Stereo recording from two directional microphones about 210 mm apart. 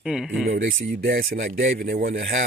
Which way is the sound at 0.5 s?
40° right (ahead or behind).